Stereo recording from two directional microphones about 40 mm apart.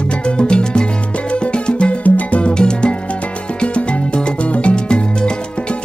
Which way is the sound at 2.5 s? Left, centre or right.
Left.